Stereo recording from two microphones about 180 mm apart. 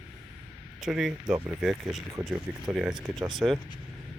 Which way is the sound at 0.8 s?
Centre (ahead or behind).